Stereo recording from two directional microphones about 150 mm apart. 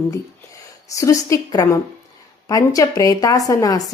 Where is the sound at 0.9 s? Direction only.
20° left (ahead or behind).